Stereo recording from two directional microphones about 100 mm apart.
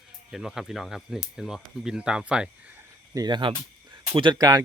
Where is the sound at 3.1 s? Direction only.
45° right (ahead or behind).